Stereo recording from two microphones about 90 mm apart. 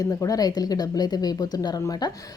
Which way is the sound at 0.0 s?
40° left (ahead or behind).